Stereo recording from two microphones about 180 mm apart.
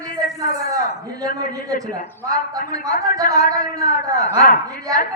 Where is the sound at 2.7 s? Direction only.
20° right (ahead or behind).